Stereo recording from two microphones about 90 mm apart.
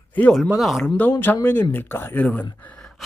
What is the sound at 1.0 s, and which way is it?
Speech, 25° left (ahead or behind).